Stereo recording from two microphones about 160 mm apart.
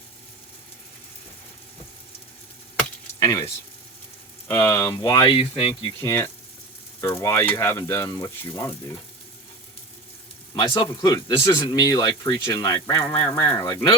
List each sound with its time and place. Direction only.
3.2 s a sound: 20° left (ahead or behind)
4.4 s speech: 15° left (ahead or behind); by 5.9 s 30° left (ahead or behind)
6.0 s speech: 15° left (ahead or behind)
10.5 s speech: 30° left (ahead or behind)